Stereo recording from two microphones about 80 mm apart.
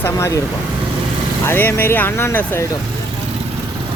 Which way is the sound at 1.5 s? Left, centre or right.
Left.